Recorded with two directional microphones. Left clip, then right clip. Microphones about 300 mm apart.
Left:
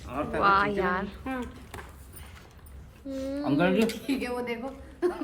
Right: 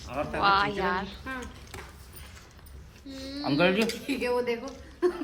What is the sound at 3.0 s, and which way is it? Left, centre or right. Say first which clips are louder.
Speech: left 4 dB; centre.